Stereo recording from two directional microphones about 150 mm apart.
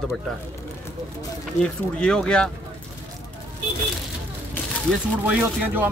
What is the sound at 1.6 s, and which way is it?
Speech, 5° left (ahead or behind).